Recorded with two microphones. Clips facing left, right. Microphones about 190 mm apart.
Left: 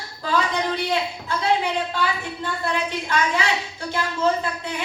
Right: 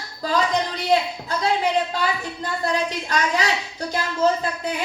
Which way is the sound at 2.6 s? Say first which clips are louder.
Right 2 dB; 40° right (ahead or behind).